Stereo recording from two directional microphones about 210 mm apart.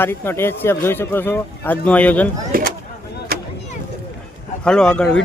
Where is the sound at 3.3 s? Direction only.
50° right (ahead or behind).